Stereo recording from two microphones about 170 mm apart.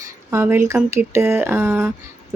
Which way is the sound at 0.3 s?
15° right (ahead or behind).